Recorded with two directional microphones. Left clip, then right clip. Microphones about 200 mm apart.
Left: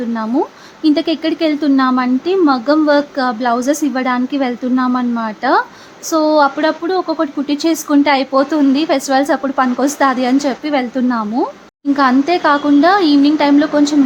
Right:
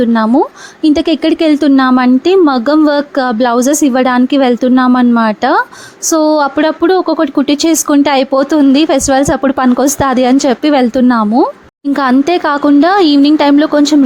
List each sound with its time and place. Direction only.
0.1 s a woman's voice: 40° right (ahead or behind)